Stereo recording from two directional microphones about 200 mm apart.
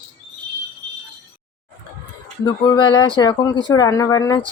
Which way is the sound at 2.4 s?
25° left (ahead or behind).